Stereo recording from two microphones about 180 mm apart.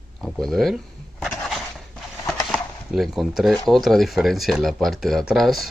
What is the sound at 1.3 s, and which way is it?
Skateboard, 5° left (ahead or behind).